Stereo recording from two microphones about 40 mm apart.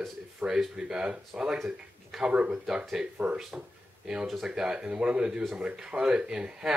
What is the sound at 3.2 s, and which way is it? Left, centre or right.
Speech, right.